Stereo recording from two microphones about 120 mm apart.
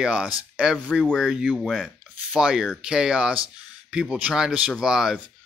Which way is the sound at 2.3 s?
5° right (ahead or behind).